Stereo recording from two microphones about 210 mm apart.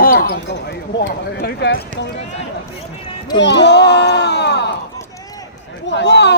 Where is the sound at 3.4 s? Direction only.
55° left (ahead or behind).